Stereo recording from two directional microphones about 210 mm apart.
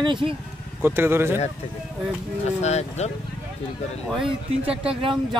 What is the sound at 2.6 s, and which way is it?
Speech, 30° left (ahead or behind).